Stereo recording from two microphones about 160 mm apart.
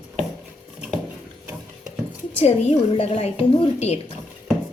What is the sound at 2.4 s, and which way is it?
A woman's voice, 40° left (ahead or behind).